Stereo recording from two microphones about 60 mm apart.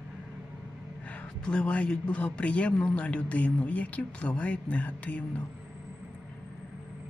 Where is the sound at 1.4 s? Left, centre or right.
Centre.